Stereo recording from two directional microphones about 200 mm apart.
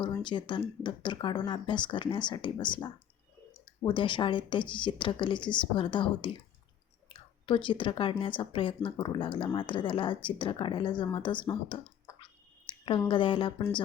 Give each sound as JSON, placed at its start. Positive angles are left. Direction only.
{"t": 0.2, "sound": "speech", "side_deg": 25}
{"t": 12.6, "sound": "a sound", "side_deg": 25}
{"t": 13.1, "sound": "speech", "side_deg": 25}